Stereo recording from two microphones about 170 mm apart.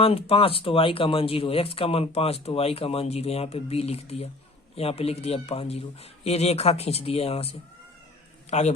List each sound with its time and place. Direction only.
0.0 s a man's voice: 35° left (ahead or behind)